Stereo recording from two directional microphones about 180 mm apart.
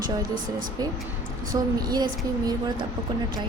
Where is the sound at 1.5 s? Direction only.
20° right (ahead or behind).